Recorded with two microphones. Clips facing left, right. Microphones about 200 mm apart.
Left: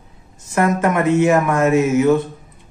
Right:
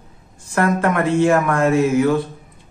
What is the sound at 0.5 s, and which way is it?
Speech, 20° left (ahead or behind).